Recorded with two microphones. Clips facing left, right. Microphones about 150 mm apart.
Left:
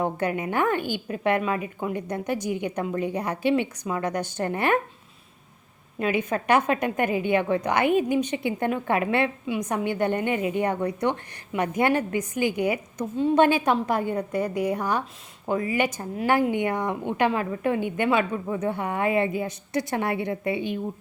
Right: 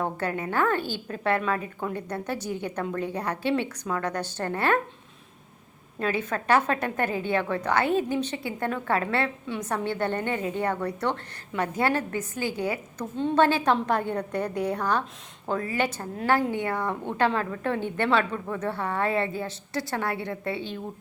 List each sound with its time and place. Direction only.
0.0 s a woman's voice: 15° left (ahead or behind)
6.0 s a woman's voice: 15° left (ahead or behind)